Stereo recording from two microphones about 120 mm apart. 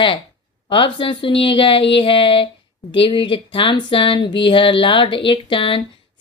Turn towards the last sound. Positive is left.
turn(degrees=45)  # may be behind; listen again after turning